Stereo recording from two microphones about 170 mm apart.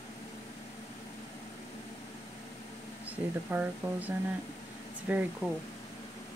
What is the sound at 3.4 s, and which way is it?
Speech, 10° right (ahead or behind).